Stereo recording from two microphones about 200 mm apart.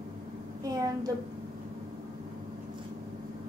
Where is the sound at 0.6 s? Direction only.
20° right (ahead or behind).